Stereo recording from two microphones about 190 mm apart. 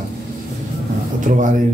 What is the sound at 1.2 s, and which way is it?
Speech, 45° right (ahead or behind).